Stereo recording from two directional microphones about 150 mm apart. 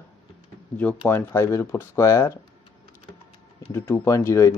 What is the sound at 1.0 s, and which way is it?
Speech, 15° left (ahead or behind).